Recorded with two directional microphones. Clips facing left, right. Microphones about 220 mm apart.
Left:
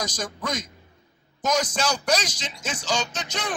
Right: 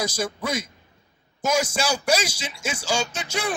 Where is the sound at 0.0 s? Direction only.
10° right (ahead or behind).